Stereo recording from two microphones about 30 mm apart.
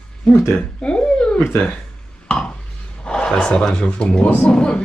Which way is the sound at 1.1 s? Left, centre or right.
Left.